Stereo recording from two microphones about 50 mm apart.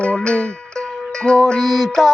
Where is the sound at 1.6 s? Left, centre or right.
Centre.